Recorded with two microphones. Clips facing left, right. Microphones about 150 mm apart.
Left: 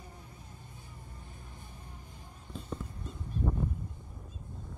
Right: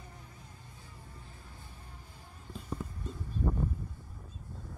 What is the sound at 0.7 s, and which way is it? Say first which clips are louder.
Vehicle: left 1 dB; 20° left (ahead or behind).